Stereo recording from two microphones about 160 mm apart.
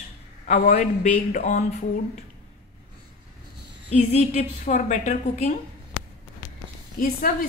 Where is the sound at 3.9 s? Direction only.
45° left (ahead or behind).